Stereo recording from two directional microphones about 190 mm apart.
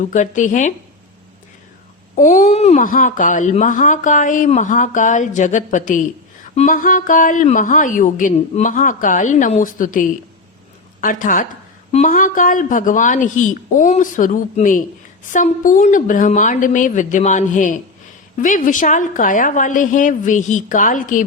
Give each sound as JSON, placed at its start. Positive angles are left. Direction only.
{"t": 0.0, "sound": "speech", "side_deg": 40}
{"t": 2.1, "sound": "speech", "side_deg": 40}